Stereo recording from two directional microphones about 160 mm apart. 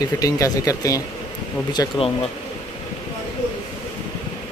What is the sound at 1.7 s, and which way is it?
Speech, 30° left (ahead or behind).